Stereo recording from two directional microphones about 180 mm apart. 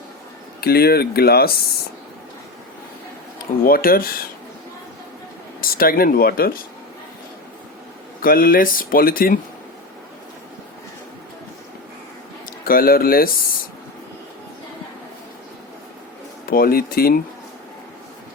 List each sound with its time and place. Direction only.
0.6 s speech: 60° left (ahead or behind)
3.6 s speech: 55° left (ahead or behind)
5.5 s speech: 55° left (ahead or behind)
8.2 s speech: 55° left (ahead or behind)
12.6 s speech: 55° left (ahead or behind)
16.5 s speech: 55° left (ahead or behind)